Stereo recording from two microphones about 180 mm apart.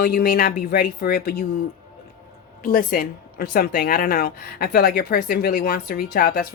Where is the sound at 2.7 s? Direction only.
50° left (ahead or behind).